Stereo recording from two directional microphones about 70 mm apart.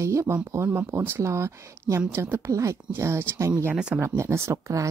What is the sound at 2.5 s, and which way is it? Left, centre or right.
Speech, right.